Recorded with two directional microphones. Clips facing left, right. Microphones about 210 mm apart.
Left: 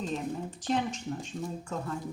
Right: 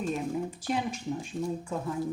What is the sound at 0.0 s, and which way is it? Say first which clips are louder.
Speech: right 3 dB; 10° right (ahead or behind).